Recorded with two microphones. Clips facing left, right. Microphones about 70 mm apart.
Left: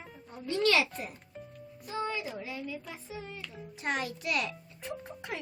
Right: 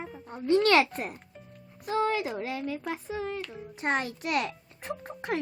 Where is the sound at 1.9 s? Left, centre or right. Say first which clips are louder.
Right 7 dB; right.